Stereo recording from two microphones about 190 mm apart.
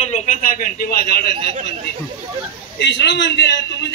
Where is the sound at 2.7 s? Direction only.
70° left (ahead or behind).